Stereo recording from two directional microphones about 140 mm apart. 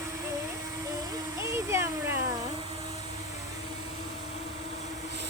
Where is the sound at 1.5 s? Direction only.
20° right (ahead or behind).